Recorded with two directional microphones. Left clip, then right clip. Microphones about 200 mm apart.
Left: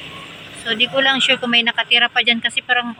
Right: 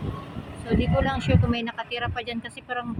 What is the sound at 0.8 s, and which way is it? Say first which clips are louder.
Speech: left 12 dB; 5° right (ahead or behind).